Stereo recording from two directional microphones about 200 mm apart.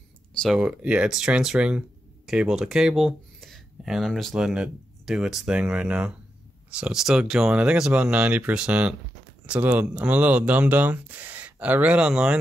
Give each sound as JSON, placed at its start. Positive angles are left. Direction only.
{"t": 0.4, "sound": "speech", "side_deg": 0}